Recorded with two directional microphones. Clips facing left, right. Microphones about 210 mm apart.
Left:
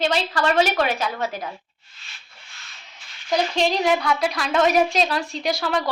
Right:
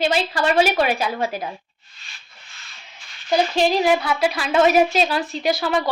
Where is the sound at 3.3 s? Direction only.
5° right (ahead or behind).